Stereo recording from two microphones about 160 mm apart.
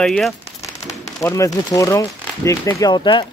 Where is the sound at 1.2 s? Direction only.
20° left (ahead or behind).